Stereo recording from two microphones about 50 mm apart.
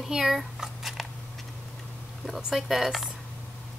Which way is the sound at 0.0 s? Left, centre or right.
Centre.